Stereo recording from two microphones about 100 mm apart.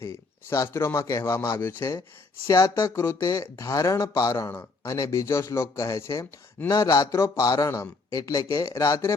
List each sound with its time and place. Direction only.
0.0 s a man's voice: 30° left (ahead or behind)
2.5 s speech: 35° left (ahead or behind)